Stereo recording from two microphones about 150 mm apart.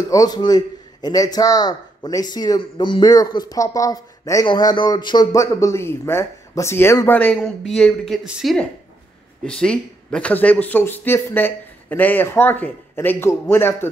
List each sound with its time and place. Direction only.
0.1 s a man's voice: 25° left (ahead or behind)